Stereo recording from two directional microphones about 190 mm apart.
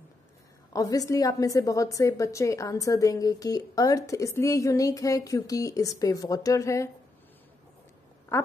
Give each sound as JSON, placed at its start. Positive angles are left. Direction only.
{"t": 0.7, "sound": "a woman's voice", "side_deg": 20}
{"t": 8.3, "sound": "a woman's voice", "side_deg": 15}